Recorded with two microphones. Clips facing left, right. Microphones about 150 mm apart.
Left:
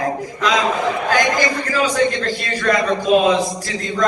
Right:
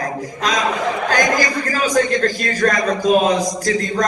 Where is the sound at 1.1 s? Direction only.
40° right (ahead or behind).